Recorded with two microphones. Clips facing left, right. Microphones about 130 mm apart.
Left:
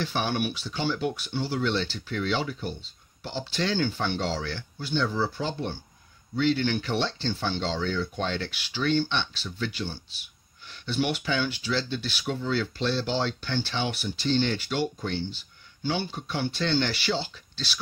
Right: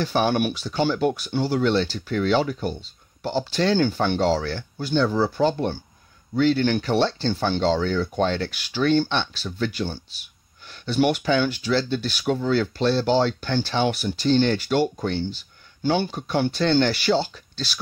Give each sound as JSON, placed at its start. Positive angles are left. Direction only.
{"t": 0.0, "sound": "speech", "side_deg": -45}